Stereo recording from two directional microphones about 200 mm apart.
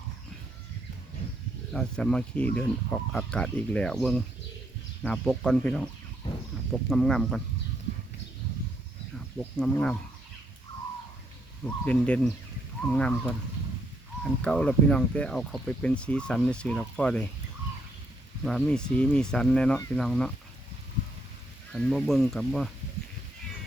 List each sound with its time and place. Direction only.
1.7 s speech: 5° left (ahead or behind)
6.9 s speech: 5° left (ahead or behind)
9.1 s speech: 5° left (ahead or behind)
11.6 s speech: 5° left (ahead or behind)
18.4 s speech: 5° left (ahead or behind)
21.7 s speech: 5° left (ahead or behind)